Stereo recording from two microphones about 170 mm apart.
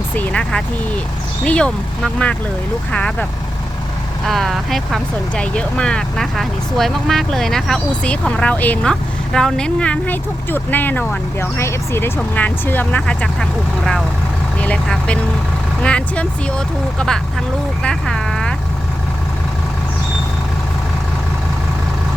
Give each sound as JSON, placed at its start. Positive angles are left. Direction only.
{"t": 0.2, "sound": "speech", "side_deg": 5}
{"t": 2.9, "sound": "speech", "side_deg": 5}
{"t": 4.3, "sound": "speech", "side_deg": 0}